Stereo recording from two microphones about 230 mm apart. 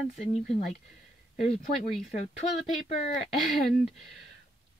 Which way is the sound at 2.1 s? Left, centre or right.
Left.